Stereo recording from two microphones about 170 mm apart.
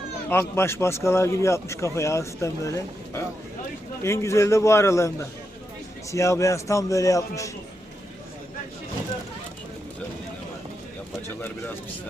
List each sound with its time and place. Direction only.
0.3 s a man's voice: 15° left (ahead or behind)